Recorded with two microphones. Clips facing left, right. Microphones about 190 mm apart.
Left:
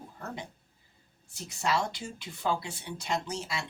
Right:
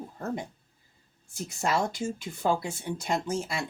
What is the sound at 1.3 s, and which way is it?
Speech, 50° right (ahead or behind).